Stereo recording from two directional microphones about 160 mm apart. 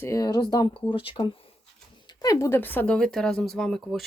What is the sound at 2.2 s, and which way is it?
Speech, 20° left (ahead or behind).